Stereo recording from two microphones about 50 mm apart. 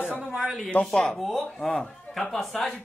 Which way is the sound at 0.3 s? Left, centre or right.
Centre.